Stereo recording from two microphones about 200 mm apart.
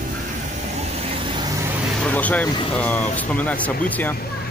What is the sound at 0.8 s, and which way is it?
Vehicle, 30° right (ahead or behind).